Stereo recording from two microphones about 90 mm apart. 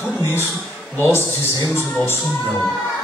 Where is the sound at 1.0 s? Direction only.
25° left (ahead or behind).